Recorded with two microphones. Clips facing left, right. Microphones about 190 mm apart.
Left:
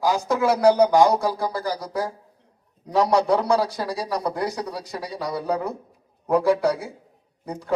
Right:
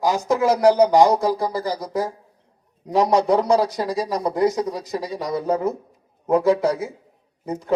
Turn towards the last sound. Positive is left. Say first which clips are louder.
# right 5 dB
turn(degrees=-20)  # may be behind; listen again after turning